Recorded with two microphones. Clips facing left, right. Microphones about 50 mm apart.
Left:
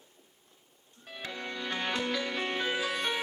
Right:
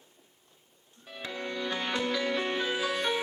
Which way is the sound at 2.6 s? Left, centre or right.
Left.